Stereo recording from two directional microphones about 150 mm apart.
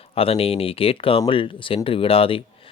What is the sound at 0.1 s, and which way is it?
Speech, 40° left (ahead or behind).